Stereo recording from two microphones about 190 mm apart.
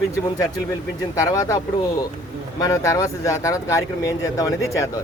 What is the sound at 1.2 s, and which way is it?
A man's voice, 15° left (ahead or behind).